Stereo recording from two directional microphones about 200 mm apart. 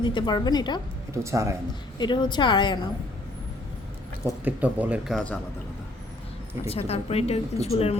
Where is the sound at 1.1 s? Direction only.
15° right (ahead or behind).